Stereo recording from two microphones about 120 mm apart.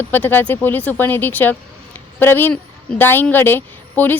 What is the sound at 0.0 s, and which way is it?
A woman's voice, 15° left (ahead or behind).